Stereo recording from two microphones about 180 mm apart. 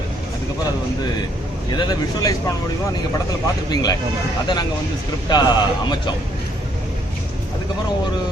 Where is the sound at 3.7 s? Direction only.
20° left (ahead or behind).